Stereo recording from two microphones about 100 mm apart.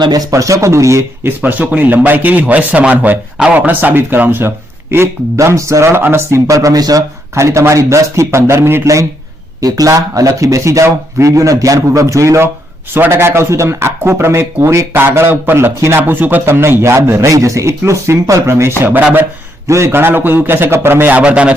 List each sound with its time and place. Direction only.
0.0 s speech: 40° right (ahead or behind)
1.4 s a man's voice: 15° right (ahead or behind)